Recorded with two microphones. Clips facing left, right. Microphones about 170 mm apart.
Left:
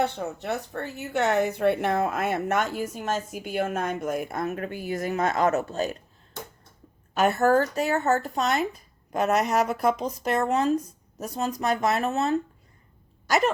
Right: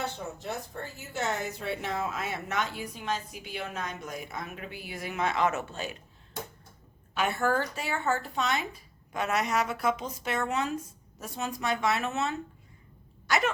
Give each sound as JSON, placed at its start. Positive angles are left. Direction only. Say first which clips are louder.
{"t": 0.0, "sound": "speech", "louder": "left 8 dB", "side_deg": 65}
{"t": 7.1, "sound": "speech", "louder": "left 7 dB", "side_deg": 45}
{"t": 13.2, "sound": "a sound", "louder": "left 5 dB", "side_deg": 40}